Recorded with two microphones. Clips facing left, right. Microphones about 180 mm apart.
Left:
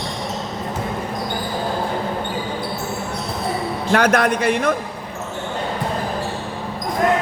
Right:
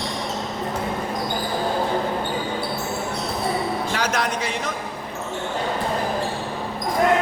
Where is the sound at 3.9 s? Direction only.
55° left (ahead or behind).